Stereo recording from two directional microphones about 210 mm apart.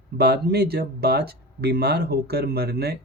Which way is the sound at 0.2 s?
50° right (ahead or behind).